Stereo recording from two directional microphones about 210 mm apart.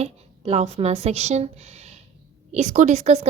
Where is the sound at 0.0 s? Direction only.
30° right (ahead or behind).